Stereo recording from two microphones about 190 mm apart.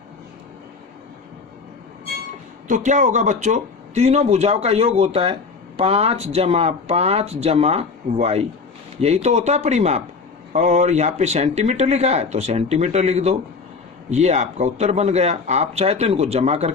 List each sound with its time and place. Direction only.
2.6 s a man's voice: 40° right (ahead or behind)